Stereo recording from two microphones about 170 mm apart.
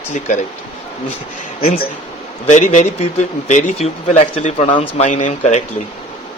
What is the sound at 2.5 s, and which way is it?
Speech, 45° left (ahead or behind).